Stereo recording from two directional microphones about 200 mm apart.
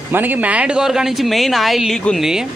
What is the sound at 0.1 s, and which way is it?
A woman's voice, 10° right (ahead or behind).